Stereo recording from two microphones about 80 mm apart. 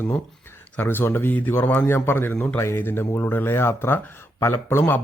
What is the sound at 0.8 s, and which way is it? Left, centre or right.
A man's voice, left.